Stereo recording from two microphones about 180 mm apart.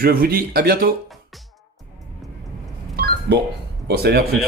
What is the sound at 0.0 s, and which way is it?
Speech, 55° right (ahead or behind).